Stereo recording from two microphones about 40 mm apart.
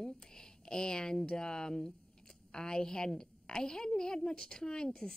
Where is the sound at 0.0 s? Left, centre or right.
Centre.